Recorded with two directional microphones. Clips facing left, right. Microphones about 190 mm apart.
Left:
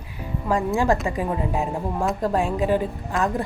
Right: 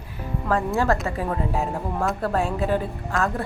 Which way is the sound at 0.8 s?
15° left (ahead or behind).